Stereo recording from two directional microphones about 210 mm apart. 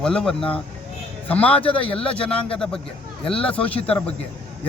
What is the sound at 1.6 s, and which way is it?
Speech, 25° left (ahead or behind).